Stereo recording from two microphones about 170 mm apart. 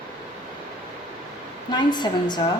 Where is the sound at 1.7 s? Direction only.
25° left (ahead or behind).